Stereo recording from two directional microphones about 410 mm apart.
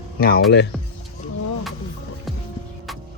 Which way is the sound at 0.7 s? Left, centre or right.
Centre.